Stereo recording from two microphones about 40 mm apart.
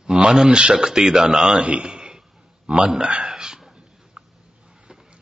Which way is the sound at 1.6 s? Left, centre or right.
Right.